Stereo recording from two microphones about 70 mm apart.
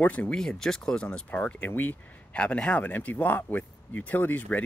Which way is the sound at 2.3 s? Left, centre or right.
Centre.